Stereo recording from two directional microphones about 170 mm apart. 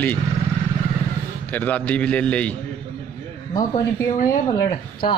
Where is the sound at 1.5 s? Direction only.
10° left (ahead or behind).